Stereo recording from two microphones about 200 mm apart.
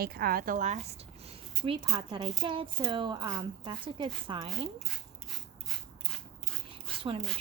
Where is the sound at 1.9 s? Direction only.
25° right (ahead or behind).